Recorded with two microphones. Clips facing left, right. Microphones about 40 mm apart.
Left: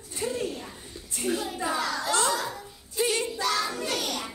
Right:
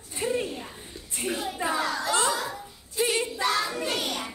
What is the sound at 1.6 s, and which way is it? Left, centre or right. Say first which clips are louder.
Children playing: right 1 dB; right.